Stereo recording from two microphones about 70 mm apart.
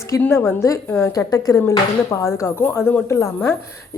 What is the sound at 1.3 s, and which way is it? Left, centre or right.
Speech, left.